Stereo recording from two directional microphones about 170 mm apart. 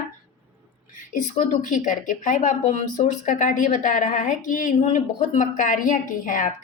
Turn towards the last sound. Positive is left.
turn(degrees=50)  # may be behind; listen again after turning